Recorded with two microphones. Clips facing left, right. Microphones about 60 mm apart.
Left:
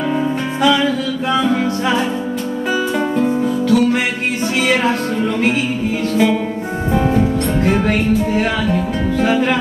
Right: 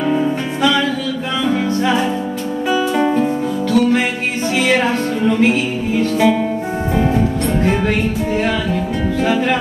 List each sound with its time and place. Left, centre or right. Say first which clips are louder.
0.1 s music: right 1 dB; centre
3.6 s music: right 1 dB; centre
7.6 s music: left 1 dB; centre
9.2 s music: left 1 dB; centre